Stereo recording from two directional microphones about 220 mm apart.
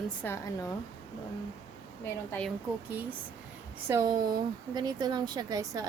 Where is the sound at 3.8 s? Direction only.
15° right (ahead or behind).